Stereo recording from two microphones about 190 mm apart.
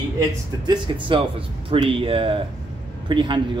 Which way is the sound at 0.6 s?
25° right (ahead or behind).